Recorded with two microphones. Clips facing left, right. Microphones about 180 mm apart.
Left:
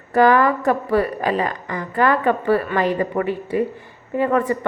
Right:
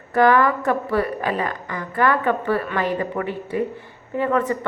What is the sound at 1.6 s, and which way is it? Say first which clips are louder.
Speech: left 3 dB; 35° left (ahead or behind).